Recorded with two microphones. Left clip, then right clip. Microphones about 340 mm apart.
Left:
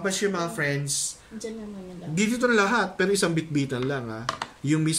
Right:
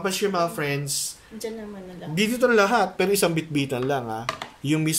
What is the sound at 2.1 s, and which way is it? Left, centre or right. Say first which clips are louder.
Speech: right 3 dB; centre.